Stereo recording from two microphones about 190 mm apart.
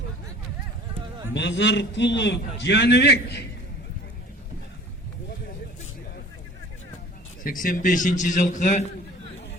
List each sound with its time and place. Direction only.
1.3 s a man's voice: 70° left (ahead or behind)
7.4 s a man's voice: 45° left (ahead or behind)